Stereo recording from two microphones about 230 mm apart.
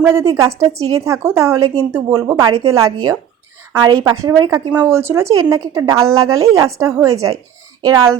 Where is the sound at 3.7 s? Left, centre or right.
Centre.